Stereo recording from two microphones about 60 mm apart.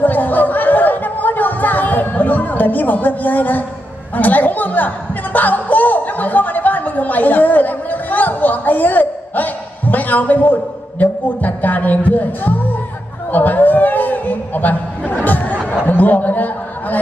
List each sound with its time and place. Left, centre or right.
0.0 s chatter: left
4.1 s speech: left
13.3 s a sound: left